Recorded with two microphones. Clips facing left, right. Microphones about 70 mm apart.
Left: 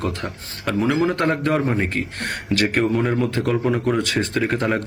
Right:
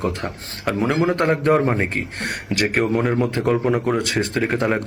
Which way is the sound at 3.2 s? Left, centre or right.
Right.